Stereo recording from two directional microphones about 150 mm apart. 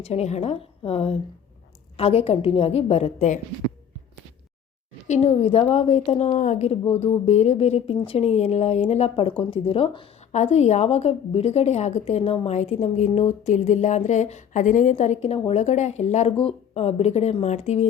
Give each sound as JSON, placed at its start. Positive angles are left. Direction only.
{"t": 0.0, "sound": "a woman's voice", "side_deg": 45}
{"t": 5.0, "sound": "a woman's voice", "side_deg": 50}
{"t": 10.3, "sound": "a woman's voice", "side_deg": 45}